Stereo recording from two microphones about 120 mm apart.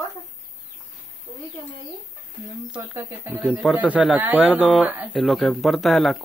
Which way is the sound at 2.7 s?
20° right (ahead or behind).